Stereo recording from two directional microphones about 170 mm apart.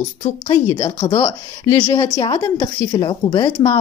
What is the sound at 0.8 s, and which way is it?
A woman's voice, 30° left (ahead or behind).